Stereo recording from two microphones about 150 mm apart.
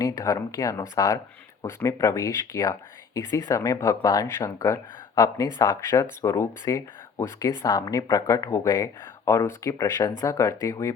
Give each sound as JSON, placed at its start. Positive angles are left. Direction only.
{"t": 0.0, "sound": "speech", "side_deg": 25}